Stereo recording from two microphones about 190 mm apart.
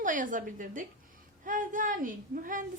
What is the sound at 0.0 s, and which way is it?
A woman's voice, 45° right (ahead or behind).